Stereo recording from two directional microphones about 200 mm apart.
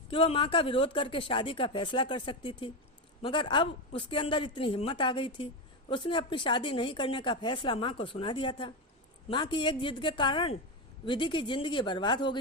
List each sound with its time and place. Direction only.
0.1 s speech: 25° left (ahead or behind)